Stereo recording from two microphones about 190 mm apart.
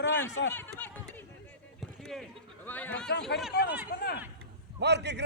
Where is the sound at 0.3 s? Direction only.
70° left (ahead or behind).